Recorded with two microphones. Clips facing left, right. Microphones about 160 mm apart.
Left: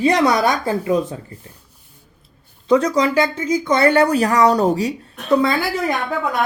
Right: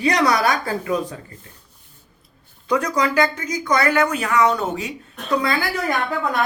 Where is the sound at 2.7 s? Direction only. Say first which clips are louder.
Left 5 dB; 25° left (ahead or behind).